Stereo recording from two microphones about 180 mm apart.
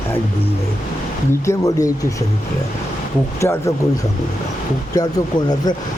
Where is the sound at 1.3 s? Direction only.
15° left (ahead or behind).